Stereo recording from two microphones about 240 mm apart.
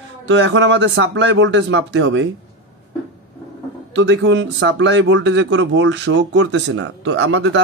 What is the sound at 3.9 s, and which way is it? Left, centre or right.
Speech, right.